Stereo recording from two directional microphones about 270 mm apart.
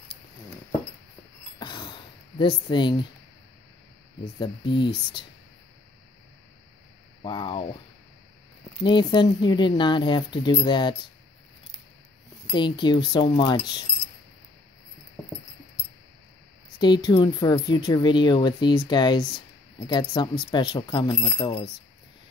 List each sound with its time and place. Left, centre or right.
1.6 s a sound: centre
4.2 s speech: centre
7.2 s speech: centre
8.8 s speech: centre
12.5 s speech: centre
16.7 s speech: centre